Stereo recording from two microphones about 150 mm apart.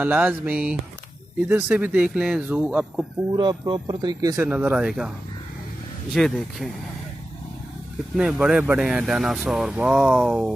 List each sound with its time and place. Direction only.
0.0 s speech: 10° right (ahead or behind)
3.3 s speech: 35° right (ahead or behind)
4.4 s speech: 10° right (ahead or behind)
6.1 s speech: centre (ahead or behind)
8.2 s speech: 5° right (ahead or behind)